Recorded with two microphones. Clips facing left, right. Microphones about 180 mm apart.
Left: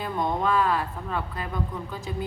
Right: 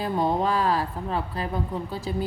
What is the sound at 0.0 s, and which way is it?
A woman's voice, 35° right (ahead or behind).